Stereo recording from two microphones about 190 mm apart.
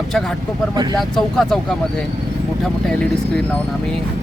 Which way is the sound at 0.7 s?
20° right (ahead or behind).